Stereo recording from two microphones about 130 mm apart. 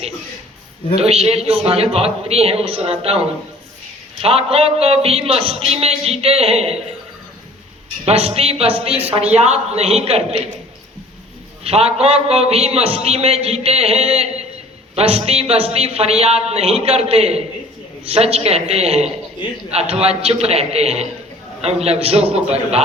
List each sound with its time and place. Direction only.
0.9 s a man's voice: 55° right (ahead or behind)
8.0 s a man's voice: 50° right (ahead or behind)
11.6 s a man's voice: 50° right (ahead or behind)